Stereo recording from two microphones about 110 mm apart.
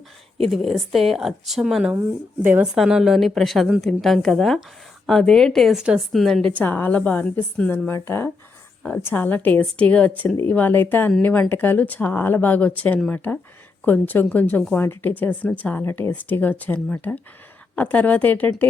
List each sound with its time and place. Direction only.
0.5 s a woman's voice: centre (ahead or behind); by 2.6 s 20° right (ahead or behind)
2.7 s a woman's voice: centre (ahead or behind)
6.6 s speech: 15° left (ahead or behind)